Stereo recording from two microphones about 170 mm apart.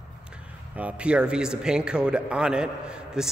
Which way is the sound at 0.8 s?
5° right (ahead or behind).